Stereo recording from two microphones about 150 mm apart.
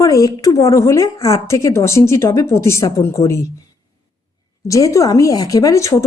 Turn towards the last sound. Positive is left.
turn(degrees=20)  # may be behind; listen again after turning